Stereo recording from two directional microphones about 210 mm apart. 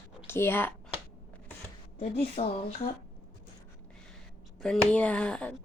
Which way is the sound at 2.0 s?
30° left (ahead or behind).